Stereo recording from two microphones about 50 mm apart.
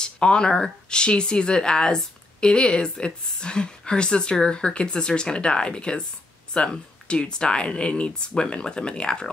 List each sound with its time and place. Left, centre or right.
0.0 s speech: centre